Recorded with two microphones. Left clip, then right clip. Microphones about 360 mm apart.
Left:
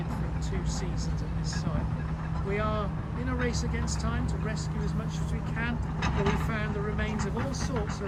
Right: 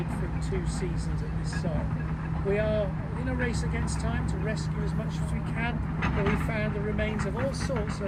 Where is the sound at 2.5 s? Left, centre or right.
Right.